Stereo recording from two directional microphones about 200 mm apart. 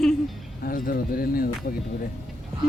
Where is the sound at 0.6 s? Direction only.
45° left (ahead or behind).